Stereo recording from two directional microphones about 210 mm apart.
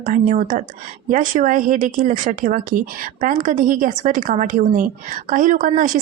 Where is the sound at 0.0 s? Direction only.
35° right (ahead or behind).